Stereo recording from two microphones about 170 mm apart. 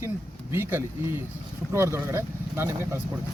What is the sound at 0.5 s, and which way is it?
Speech, 15° right (ahead or behind).